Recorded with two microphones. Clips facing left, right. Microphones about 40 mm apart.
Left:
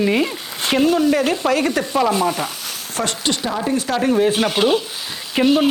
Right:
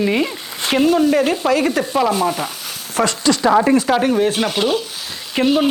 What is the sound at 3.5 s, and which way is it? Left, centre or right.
Speech, right.